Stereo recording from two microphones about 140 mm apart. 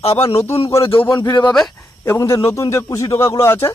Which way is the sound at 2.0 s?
20° left (ahead or behind).